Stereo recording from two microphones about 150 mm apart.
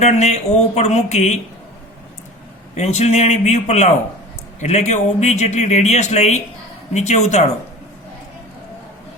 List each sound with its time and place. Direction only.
0.0 s speech: 50° left (ahead or behind)
2.7 s speech: 45° left (ahead or behind)